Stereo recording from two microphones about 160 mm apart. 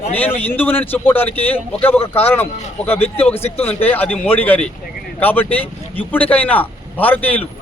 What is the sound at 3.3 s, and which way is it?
Speech, 40° left (ahead or behind).